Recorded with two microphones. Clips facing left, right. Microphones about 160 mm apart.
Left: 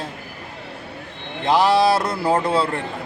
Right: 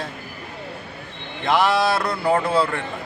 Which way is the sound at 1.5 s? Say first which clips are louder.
Left 3 dB; 35° left (ahead or behind).